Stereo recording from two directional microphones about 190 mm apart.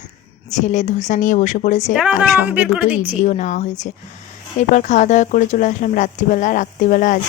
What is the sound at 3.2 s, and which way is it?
Speech, 40° left (ahead or behind).